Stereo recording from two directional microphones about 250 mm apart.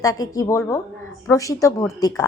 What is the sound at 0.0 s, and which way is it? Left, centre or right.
A woman's voice, centre.